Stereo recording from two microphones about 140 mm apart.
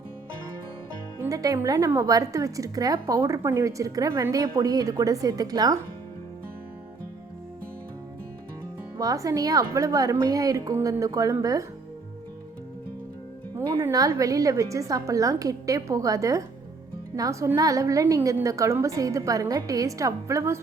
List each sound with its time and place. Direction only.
1.2 s a woman's voice: 25° right (ahead or behind)
9.0 s a woman's voice: 25° right (ahead or behind)
13.6 s a woman's voice: 20° right (ahead or behind)